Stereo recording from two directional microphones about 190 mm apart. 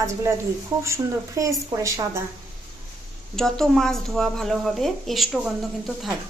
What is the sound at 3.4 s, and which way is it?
Speech, centre (ahead or behind).